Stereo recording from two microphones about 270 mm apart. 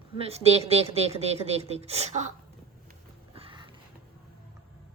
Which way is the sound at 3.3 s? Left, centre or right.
Centre.